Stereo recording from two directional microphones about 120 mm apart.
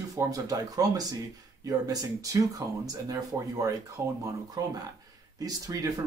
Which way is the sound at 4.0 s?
20° right (ahead or behind).